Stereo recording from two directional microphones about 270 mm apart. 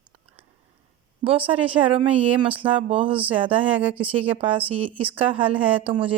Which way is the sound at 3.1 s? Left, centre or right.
Centre.